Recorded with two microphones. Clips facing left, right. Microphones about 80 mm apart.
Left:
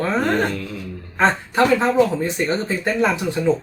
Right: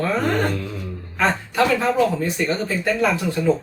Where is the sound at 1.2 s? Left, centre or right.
Left.